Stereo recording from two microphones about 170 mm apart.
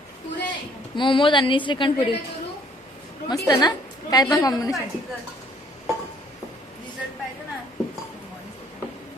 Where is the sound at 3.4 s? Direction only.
25° left (ahead or behind).